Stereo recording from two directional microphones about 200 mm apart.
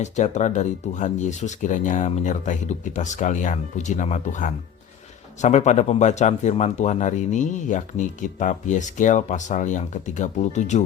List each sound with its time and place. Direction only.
0.0 s speech: 35° left (ahead or behind)